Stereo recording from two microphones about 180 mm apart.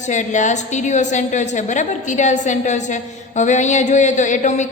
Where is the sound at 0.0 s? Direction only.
40° left (ahead or behind).